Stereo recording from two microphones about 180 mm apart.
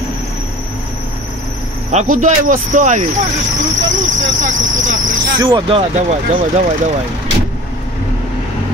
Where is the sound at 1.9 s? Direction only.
45° right (ahead or behind).